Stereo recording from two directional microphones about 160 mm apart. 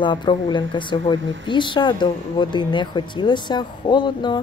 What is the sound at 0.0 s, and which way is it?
Speech, 30° left (ahead or behind).